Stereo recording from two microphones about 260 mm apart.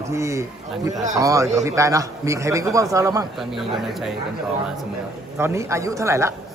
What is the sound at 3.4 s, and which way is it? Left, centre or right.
Speech, centre.